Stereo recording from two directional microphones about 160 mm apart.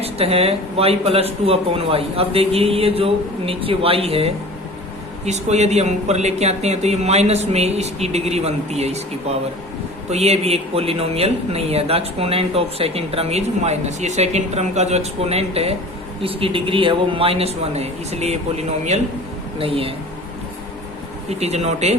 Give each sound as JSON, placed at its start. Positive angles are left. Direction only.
{"t": 0.0, "sound": "speech", "side_deg": -40}
{"t": 10.1, "sound": "speech", "side_deg": -40}
{"t": 21.2, "sound": "speech", "side_deg": -40}